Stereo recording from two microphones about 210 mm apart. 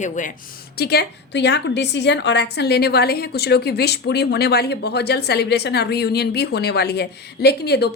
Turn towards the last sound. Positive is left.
turn(degrees=50)  # may be behind; listen again after turning